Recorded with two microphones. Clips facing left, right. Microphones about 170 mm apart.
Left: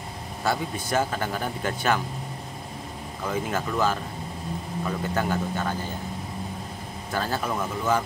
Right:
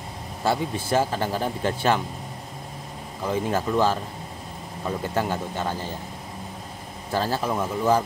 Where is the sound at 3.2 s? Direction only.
30° right (ahead or behind).